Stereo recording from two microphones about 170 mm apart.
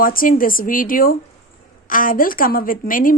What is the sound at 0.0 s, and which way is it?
Speech, 55° left (ahead or behind).